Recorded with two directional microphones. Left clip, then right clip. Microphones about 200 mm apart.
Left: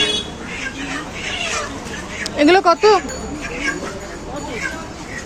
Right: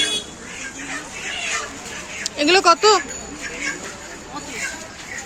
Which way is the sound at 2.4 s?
Centre (ahead or behind).